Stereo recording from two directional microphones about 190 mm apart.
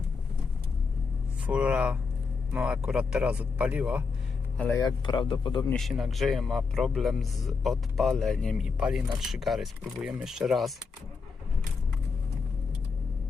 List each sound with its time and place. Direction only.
1.5 s a man's voice: 5° right (ahead or behind)
4.5 s a man's voice: 5° left (ahead or behind)
4.8 s speech: 20° left (ahead or behind)
5.7 s a man's voice: centre (ahead or behind)